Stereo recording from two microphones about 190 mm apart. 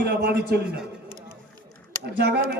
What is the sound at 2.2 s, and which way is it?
Speech, 60° right (ahead or behind).